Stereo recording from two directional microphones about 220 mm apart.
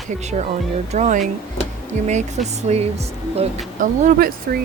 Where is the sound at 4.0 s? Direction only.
40° right (ahead or behind).